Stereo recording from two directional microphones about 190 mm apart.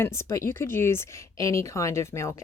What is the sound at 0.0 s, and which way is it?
Speech, 15° left (ahead or behind).